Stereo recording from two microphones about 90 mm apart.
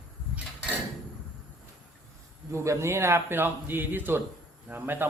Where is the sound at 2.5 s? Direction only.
30° right (ahead or behind).